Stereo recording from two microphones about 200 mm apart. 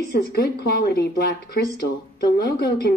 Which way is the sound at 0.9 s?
50° left (ahead or behind).